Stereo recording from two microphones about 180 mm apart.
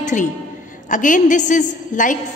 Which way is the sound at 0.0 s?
45° left (ahead or behind).